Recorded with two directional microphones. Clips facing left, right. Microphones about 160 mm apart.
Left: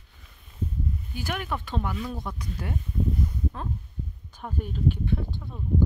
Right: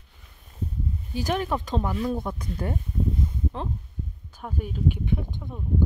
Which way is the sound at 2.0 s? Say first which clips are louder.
Right 6 dB; 50° right (ahead or behind).